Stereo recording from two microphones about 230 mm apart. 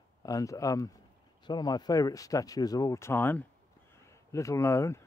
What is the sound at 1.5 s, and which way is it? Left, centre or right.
Speech, centre.